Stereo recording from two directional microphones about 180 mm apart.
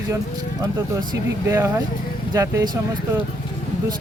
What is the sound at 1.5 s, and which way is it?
Speech, 15° right (ahead or behind).